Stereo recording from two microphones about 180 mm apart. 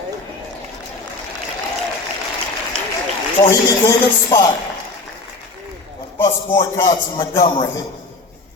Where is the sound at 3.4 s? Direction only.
20° left (ahead or behind).